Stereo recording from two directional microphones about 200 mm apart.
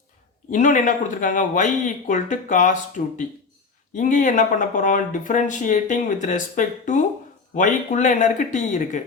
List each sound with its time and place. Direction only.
0.5 s speech: 40° left (ahead or behind)